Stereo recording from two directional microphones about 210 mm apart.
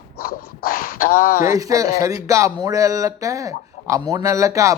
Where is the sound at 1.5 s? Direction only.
15° right (ahead or behind).